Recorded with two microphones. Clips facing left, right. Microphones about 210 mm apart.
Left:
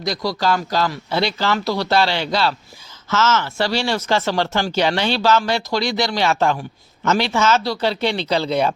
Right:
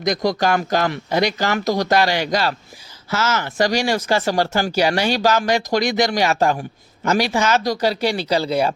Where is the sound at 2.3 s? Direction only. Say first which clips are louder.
Even; 45° right (ahead or behind).